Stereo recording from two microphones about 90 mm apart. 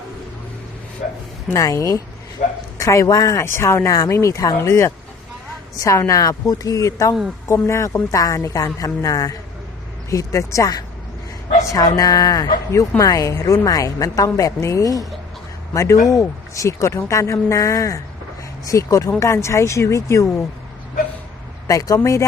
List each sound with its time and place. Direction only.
1.5 s speech: 40° left (ahead or behind)
21.7 s speech: 40° left (ahead or behind)